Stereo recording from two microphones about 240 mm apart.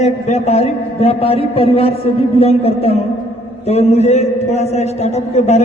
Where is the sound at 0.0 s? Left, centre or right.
Left.